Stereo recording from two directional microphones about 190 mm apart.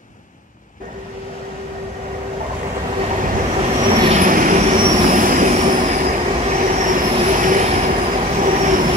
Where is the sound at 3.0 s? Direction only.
35° right (ahead or behind).